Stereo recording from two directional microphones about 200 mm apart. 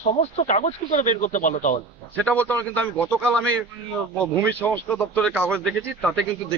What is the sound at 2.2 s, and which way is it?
A man's voice, 5° left (ahead or behind).